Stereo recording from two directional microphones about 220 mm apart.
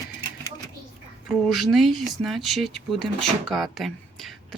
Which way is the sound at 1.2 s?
Centre (ahead or behind).